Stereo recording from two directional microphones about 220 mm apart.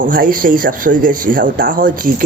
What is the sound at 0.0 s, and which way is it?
Speech, 40° right (ahead or behind).